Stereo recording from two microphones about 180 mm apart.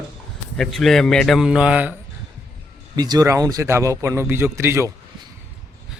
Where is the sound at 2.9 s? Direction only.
20° right (ahead or behind).